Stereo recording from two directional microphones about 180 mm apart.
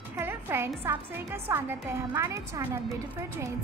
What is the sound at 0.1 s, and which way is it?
Music, 10° right (ahead or behind).